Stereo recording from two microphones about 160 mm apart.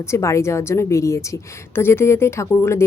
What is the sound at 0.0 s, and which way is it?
A woman's voice, 15° left (ahead or behind).